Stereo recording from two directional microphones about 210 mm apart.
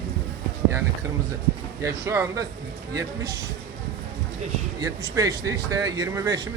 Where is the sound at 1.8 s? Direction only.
15° right (ahead or behind).